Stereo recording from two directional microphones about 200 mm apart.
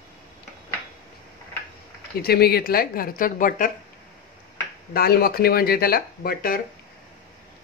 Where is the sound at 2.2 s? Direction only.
50° left (ahead or behind).